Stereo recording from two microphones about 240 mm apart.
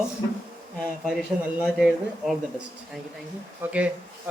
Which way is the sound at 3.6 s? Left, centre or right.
Centre.